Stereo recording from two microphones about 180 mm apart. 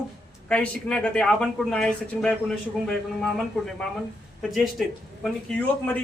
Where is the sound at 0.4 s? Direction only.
5° left (ahead or behind).